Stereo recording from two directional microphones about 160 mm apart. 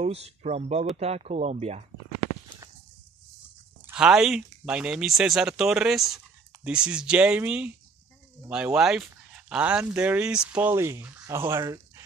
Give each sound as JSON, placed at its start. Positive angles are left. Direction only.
{"t": 0.0, "sound": "speech", "side_deg": -40}
{"t": 3.8, "sound": "speech", "side_deg": -5}